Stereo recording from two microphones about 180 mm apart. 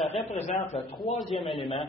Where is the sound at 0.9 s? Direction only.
30° left (ahead or behind).